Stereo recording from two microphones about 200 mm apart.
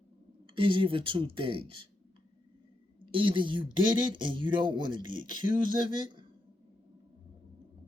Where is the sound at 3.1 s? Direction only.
25° right (ahead or behind).